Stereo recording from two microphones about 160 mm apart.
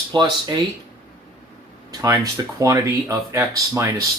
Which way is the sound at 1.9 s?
20° right (ahead or behind).